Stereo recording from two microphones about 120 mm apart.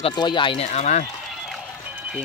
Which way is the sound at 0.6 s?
70° left (ahead or behind).